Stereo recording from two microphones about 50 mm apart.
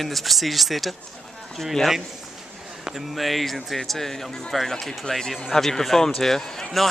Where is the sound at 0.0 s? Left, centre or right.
Centre.